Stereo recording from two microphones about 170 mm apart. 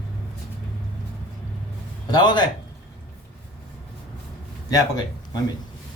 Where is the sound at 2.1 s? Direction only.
25° left (ahead or behind).